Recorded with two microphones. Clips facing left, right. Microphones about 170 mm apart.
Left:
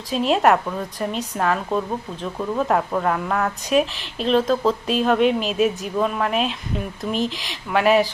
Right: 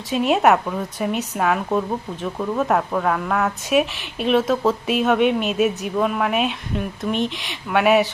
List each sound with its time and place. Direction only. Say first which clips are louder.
0.1 s a woman's voice: right 1 dB; 5° right (ahead or behind)